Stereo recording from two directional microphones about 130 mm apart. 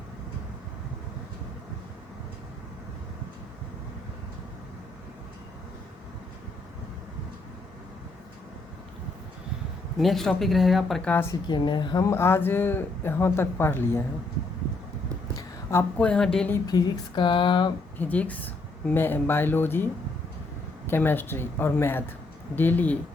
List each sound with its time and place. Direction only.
10.0 s speech: centre (ahead or behind)
11.1 s speech: 20° left (ahead or behind)
11.4 s speech: 35° left (ahead or behind); by 14.0 s 15° left (ahead or behind)
15.4 s a sound: 20° left (ahead or behind)
16.0 s speech: 5° left (ahead or behind)
16.6 s speech: 35° left (ahead or behind)
17.9 s speech: 10° left (ahead or behind)